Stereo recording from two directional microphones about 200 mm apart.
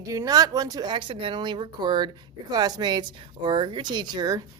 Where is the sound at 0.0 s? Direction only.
15° right (ahead or behind).